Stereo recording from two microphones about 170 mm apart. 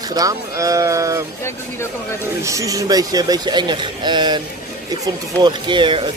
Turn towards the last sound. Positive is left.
turn(degrees=-30)  # may be behind; listen again after turning